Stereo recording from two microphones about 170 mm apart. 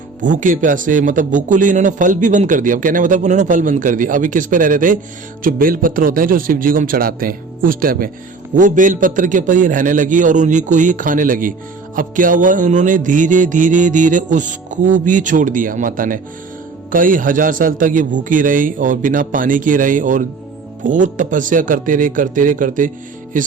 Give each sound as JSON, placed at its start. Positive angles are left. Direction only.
{"t": 0.2, "sound": "speech", "side_deg": -50}